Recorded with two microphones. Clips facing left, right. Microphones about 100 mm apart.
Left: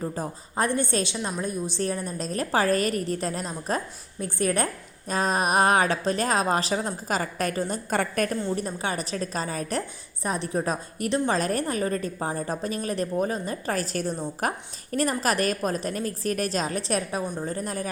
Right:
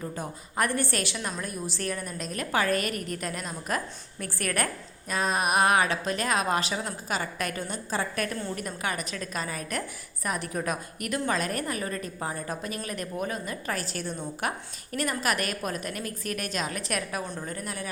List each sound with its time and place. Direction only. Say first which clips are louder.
0.0 s a woman's voice: left 4 dB; 30° left (ahead or behind)
4.2 s a woman's voice: left 5 dB; 25° left (ahead or behind)
7.9 s a woman's voice: left 3 dB; 60° left (ahead or behind)
8.4 s a woman's voice: left 4 dB; 30° left (ahead or behind)